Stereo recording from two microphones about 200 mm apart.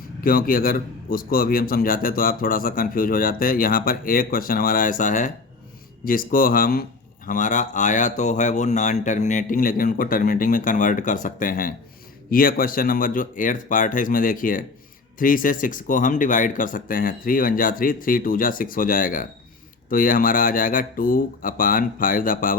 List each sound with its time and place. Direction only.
0.2 s a man's voice: 45° left (ahead or behind)